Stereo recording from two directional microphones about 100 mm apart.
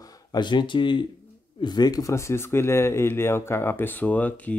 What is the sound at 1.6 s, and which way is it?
Speech, 45° left (ahead or behind).